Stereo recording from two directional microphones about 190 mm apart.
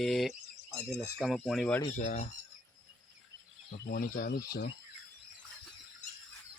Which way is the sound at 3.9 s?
50° left (ahead or behind).